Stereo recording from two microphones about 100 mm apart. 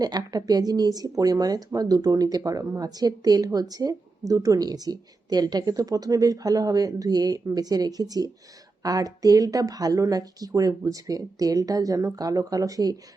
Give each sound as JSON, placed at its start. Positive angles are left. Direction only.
{"t": 0.0, "sound": "speech", "side_deg": -40}